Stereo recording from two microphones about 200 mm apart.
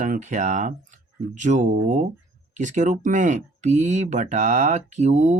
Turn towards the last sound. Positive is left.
turn(degrees=-35)  # may be behind; listen again after turning